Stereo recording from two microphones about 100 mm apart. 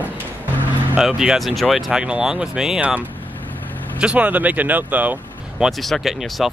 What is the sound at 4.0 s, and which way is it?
Speech, 10° right (ahead or behind).